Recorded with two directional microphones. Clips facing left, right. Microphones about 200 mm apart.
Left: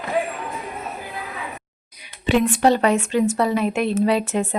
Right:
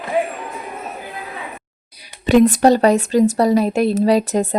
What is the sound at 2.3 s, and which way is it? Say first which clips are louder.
Speech: right 5 dB; 40° right (ahead or behind).